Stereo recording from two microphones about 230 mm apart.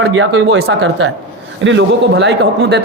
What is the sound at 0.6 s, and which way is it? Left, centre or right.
A man's voice, right.